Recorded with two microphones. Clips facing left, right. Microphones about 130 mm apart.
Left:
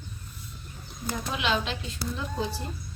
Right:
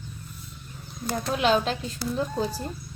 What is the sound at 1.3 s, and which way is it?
Speech, 45° right (ahead or behind).